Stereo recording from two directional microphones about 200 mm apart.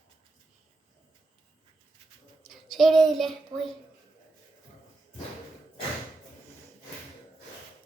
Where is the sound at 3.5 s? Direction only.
15° right (ahead or behind).